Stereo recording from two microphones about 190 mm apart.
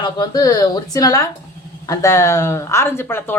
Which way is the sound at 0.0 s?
20° left (ahead or behind).